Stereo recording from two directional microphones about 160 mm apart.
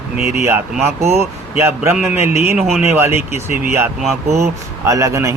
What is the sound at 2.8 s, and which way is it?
Speech, 15° right (ahead or behind).